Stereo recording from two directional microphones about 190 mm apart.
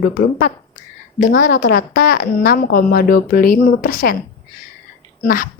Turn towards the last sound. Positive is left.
turn(degrees=45)  # may be behind; listen again after turning